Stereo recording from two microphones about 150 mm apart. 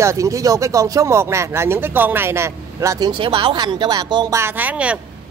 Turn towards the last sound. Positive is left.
turn(degrees=-10)  # may be behind; listen again after turning